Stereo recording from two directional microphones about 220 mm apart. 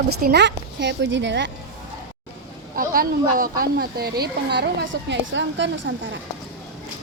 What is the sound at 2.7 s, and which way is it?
Speech, 40° right (ahead or behind).